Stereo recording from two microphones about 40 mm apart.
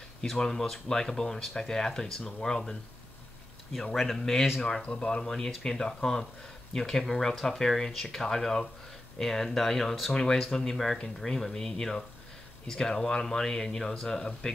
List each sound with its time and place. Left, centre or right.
0.4 s speech: centre
3.9 s speech: centre
4.8 s speech: left